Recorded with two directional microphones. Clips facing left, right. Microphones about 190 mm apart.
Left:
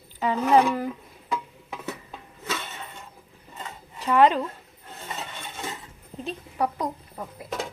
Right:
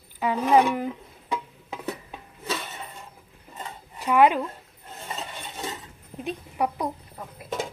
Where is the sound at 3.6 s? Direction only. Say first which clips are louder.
Even; 10° right (ahead or behind).